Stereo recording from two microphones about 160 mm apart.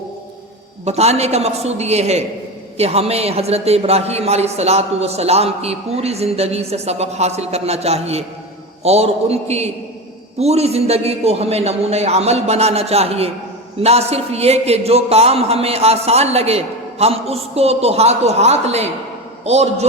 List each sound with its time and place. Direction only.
0.9 s a man's voice: 40° right (ahead or behind)